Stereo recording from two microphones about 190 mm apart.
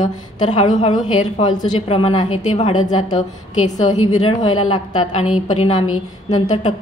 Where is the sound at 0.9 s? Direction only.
25° left (ahead or behind).